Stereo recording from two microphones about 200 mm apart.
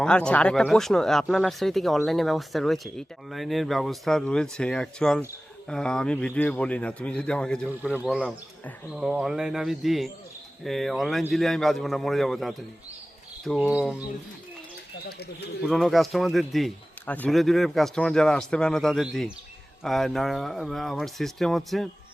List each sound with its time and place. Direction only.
0.0 s speech: 5° left (ahead or behind)
7.7 s speech: 5° right (ahead or behind)
15.0 s speech: 55° left (ahead or behind)
15.6 s speech: centre (ahead or behind)